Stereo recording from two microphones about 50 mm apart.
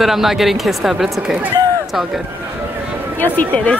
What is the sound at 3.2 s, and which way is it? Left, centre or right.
Speech, left.